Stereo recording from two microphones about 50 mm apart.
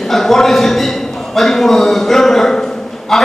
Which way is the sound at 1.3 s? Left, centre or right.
Centre.